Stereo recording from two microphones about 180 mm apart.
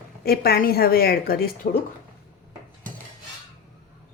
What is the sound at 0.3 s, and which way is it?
A woman's voice, 60° left (ahead or behind).